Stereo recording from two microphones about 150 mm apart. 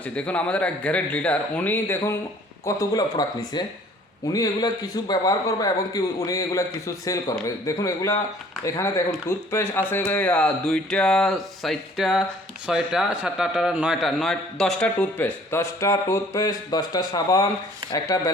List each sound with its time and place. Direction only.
0.0 s a man's voice: 10° left (ahead or behind); by 18.3 s 25° left (ahead or behind)